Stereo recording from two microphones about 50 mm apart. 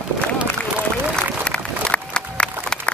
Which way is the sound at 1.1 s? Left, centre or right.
Left.